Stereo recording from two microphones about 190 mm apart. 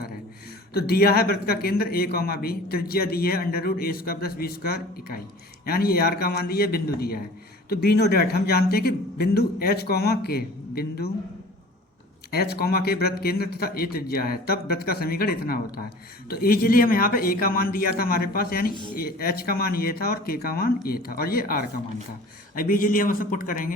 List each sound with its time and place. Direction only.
0.7 s a man's voice: 55° left (ahead or behind)
12.3 s a man's voice: 55° left (ahead or behind)